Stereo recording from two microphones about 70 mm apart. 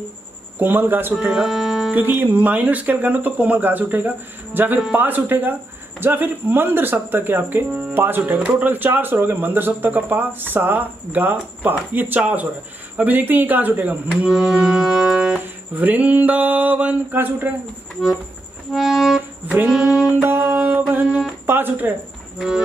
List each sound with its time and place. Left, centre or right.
0.6 s speech: right
1.2 s speech: centre
1.9 s speech: right
12.2 s speech: centre
14.3 s music: centre
15.7 s speech: right
18.7 s accordion: centre
19.7 s music: centre
20.2 s music: right
20.9 s speech: right